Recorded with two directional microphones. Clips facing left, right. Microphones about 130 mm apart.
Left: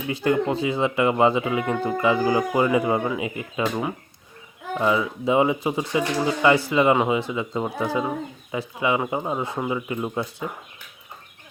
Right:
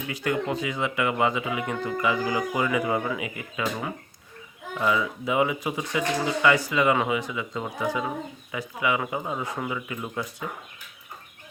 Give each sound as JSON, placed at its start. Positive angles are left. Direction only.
{"t": 0.1, "sound": "speech", "side_deg": 30}